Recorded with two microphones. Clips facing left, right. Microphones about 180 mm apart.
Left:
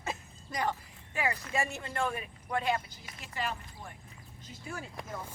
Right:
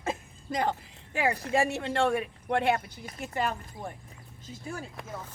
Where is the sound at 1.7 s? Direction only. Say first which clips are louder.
Right 8 dB; 80° right.